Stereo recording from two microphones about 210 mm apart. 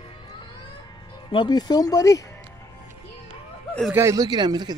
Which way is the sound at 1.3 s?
20° left (ahead or behind).